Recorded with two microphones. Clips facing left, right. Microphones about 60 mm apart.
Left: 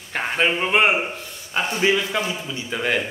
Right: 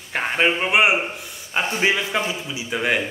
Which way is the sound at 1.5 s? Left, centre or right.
Right.